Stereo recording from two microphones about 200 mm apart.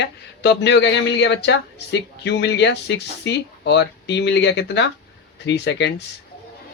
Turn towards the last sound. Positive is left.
turn(degrees=60)  # may be behind; listen again after turning